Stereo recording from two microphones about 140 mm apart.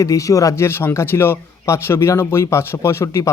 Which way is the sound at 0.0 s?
25° left (ahead or behind).